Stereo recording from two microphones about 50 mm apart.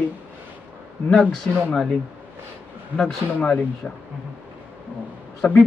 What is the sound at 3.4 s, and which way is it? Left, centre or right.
Speech, left.